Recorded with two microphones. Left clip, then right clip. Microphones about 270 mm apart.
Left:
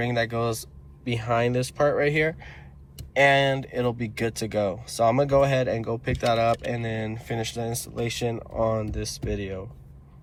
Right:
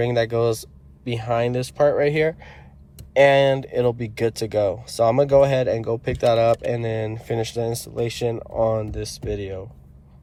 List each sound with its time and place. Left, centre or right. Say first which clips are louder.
0.0 s speech: right 6 dB; right